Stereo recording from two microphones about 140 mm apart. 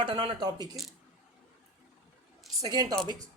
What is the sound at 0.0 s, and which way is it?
Speech, 35° right (ahead or behind).